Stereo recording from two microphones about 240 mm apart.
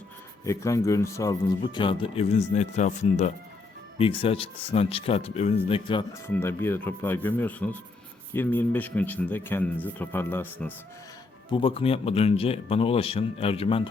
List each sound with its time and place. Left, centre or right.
0.4 s speech: centre
11.5 s speech: left